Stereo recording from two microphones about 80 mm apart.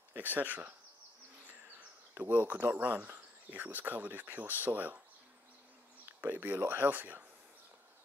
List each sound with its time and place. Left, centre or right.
0.1 s speech: right
2.1 s speech: right
6.2 s speech: right